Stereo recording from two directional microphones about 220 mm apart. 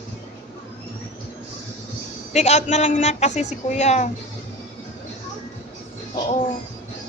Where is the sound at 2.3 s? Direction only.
30° left (ahead or behind).